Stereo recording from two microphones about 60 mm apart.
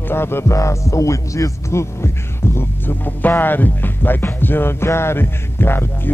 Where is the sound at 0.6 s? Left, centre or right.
Left.